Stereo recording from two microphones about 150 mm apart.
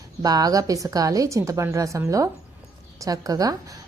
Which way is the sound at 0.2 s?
25° right (ahead or behind).